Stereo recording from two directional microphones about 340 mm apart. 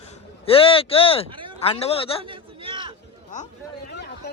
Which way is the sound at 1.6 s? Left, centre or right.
Centre.